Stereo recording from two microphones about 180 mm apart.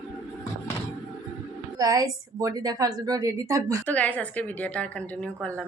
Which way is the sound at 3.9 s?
10° left (ahead or behind).